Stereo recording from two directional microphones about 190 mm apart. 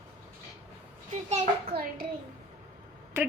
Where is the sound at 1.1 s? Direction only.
35° right (ahead or behind).